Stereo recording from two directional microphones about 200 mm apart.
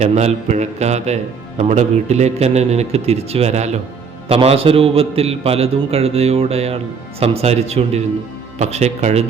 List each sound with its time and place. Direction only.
0.0 s a man's voice: 35° right (ahead or behind)